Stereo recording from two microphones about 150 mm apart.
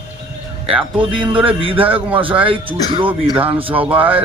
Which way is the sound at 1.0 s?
35° right (ahead or behind).